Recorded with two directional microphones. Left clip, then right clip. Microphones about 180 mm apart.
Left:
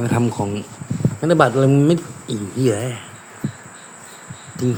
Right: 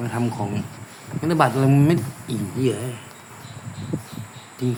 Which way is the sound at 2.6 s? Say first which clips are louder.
Left 5 dB; 25° left (ahead or behind).